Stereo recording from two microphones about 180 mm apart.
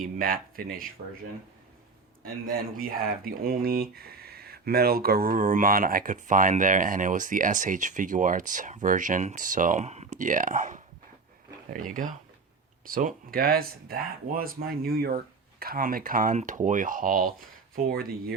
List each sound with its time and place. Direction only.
0.0 s speech: 55° right (ahead or behind)
2.2 s speech: 55° right (ahead or behind)